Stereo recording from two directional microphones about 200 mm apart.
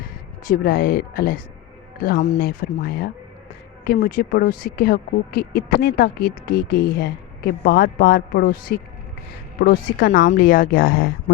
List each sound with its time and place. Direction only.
0.4 s speech: 45° left (ahead or behind)
2.4 s speech: 50° left (ahead or behind)